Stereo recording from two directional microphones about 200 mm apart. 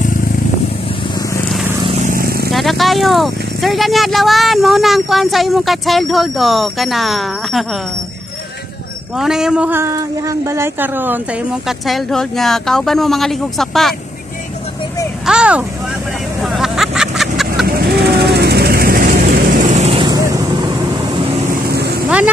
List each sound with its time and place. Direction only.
2.0 s vehicle: 45° right (ahead or behind)
2.5 s speech: centre (ahead or behind)
9.1 s speech: centre (ahead or behind)
15.2 s speech: 5° right (ahead or behind)
16.4 s vehicle: centre (ahead or behind)
17.6 s vehicle: 50° right (ahead or behind); by 20.1 s 30° right (ahead or behind)
20.1 s vehicle: 20° right (ahead or behind)
21.6 s vehicle: 55° right (ahead or behind)